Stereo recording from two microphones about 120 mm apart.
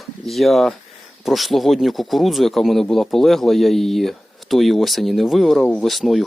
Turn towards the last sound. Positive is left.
turn(degrees=0)  # may be behind; listen again after turning